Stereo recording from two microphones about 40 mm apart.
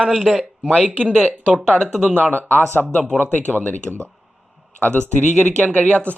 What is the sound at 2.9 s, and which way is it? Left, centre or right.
Speech, left.